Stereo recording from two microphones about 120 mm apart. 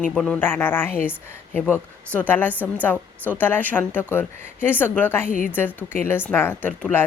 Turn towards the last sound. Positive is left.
turn(degrees=15)  # may be behind; listen again after turning